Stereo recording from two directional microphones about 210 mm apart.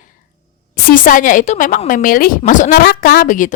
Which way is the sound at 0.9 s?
40° left (ahead or behind).